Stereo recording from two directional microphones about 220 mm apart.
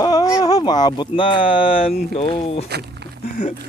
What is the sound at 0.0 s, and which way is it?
Speech, 15° left (ahead or behind).